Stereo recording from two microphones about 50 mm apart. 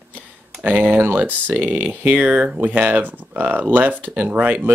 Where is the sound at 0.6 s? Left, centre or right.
Right.